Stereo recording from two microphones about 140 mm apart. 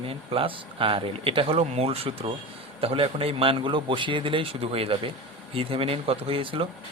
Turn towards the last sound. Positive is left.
turn(degrees=-40)  # may be behind; listen again after turning